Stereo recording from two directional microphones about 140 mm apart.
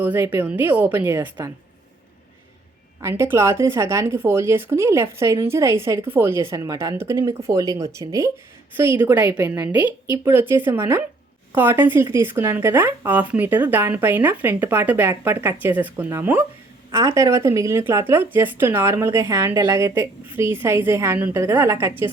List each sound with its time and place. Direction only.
0.0 s speech: 10° right (ahead or behind)
3.0 s speech: 20° right (ahead or behind)